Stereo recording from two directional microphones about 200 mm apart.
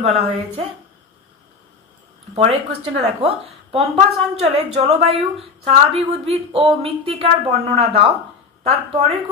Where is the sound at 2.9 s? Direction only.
30° right (ahead or behind).